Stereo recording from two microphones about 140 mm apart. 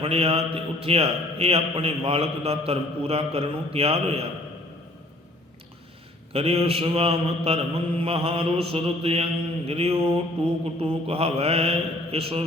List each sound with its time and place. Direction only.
0.0 s a man's voice: 45° right (ahead or behind)
6.3 s a man's voice: 45° right (ahead or behind)